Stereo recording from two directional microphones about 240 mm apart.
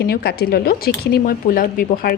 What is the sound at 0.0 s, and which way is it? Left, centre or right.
Speech, left.